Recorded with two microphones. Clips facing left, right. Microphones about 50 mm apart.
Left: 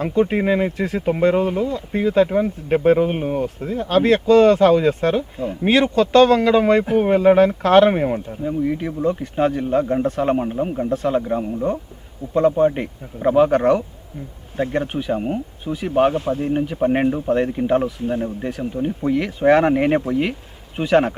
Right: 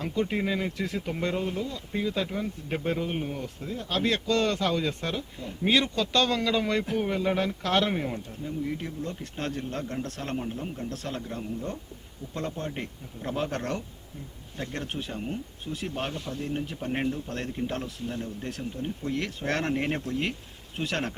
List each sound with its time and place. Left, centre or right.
0.2 s speech: left
1.7 s speech: left
4.3 s speech: centre
9.0 s speech: centre